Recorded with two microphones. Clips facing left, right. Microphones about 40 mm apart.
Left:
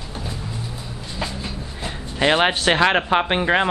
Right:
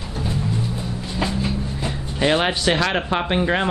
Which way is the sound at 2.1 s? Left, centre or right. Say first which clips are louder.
Left 2 dB; centre.